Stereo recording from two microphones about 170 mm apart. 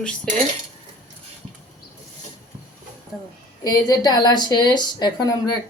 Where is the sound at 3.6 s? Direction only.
20° left (ahead or behind).